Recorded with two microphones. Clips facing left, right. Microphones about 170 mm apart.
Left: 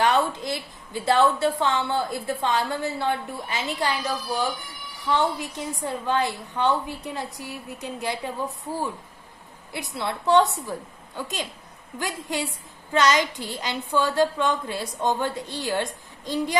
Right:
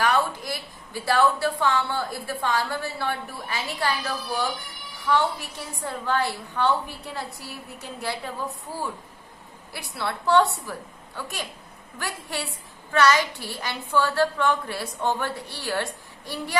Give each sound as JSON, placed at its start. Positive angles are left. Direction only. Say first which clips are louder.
{"t": 0.3, "sound": "a woman's voice", "louder": "left 3 dB", "side_deg": 25}
{"t": 9.7, "sound": "a woman's voice", "louder": "left 1 dB", "side_deg": 20}